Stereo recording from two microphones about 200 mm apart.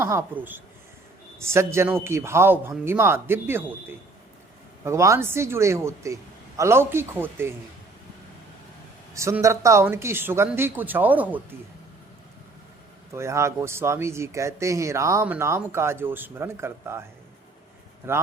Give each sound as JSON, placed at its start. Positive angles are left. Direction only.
{"t": 0.0, "sound": "speech", "side_deg": -15}
{"t": 9.1, "sound": "speech", "side_deg": -15}
{"t": 13.1, "sound": "speech", "side_deg": -15}
{"t": 18.0, "sound": "speech", "side_deg": -10}